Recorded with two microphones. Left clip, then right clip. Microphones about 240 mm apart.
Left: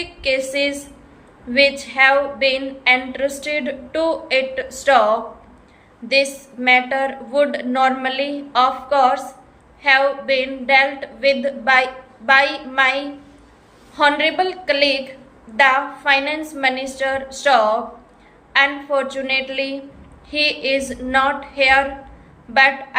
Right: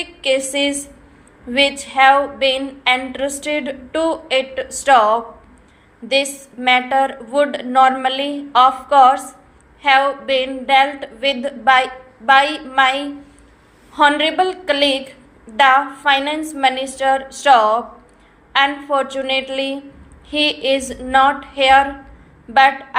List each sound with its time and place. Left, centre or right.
0.0 s a woman's voice: centre